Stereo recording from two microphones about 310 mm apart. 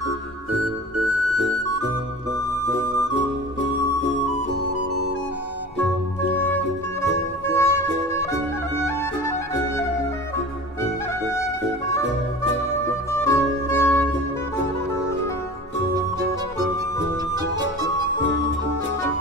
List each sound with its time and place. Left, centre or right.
7.4 s music: centre
8.8 s music: centre
13.1 s music: centre